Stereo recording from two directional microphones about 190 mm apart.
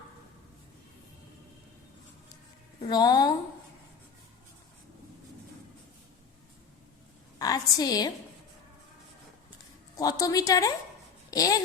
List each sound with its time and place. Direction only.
2.9 s a woman's voice: 20° left (ahead or behind)
7.3 s a woman's voice: 20° left (ahead or behind)
9.9 s a woman's voice: 20° left (ahead or behind)